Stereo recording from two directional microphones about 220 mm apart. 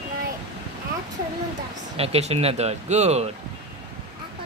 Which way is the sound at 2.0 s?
30° right (ahead or behind).